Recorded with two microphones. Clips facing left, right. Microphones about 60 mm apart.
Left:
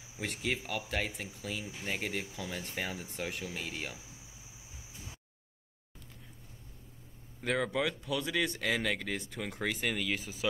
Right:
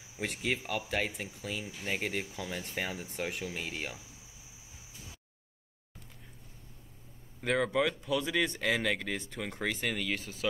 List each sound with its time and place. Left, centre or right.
0.2 s speech: centre
7.4 s speech: centre